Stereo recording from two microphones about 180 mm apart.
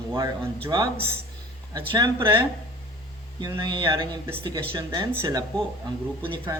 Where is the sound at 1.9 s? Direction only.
25° right (ahead or behind).